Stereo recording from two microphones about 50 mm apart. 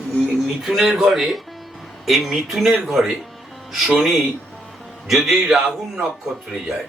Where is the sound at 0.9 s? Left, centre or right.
Centre.